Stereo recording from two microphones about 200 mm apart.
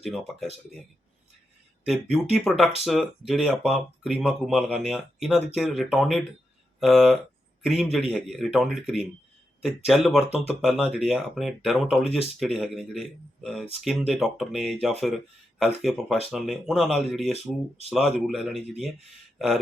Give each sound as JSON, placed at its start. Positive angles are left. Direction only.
{"t": 0.0, "sound": "speech", "side_deg": 0}
{"t": 1.8, "sound": "a man's voice", "side_deg": 0}